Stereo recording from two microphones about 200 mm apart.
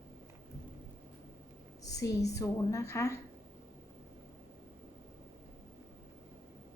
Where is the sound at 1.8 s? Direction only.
15° left (ahead or behind).